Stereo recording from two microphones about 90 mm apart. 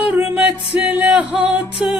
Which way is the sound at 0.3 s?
15° right (ahead or behind).